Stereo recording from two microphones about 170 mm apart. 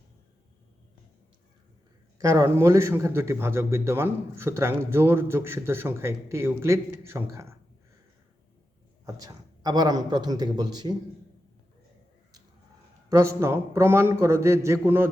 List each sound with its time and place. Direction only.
2.1 s a man's voice: 20° right (ahead or behind)
9.0 s a man's voice: 20° right (ahead or behind)
13.1 s a man's voice: 15° right (ahead or behind)